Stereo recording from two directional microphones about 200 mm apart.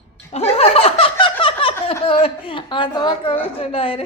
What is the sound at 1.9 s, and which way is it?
Speech, 30° left (ahead or behind).